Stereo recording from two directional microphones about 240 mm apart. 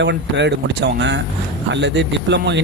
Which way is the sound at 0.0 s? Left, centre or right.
Right.